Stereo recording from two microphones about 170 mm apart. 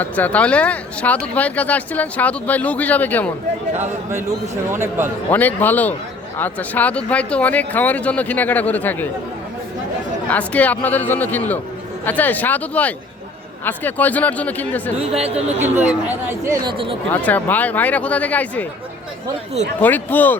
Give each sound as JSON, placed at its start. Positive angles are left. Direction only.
{"t": 0.0, "sound": "speech", "side_deg": 10}
{"t": 4.7, "sound": "a man's voice", "side_deg": -15}
{"t": 5.3, "sound": "speech", "side_deg": 10}
{"t": 10.2, "sound": "speech", "side_deg": 10}
{"t": 15.2, "sound": "speech", "side_deg": -40}
{"t": 16.6, "sound": "speech", "side_deg": -30}
{"t": 17.1, "sound": "speech", "side_deg": 10}
{"t": 19.8, "sound": "speech", "side_deg": 10}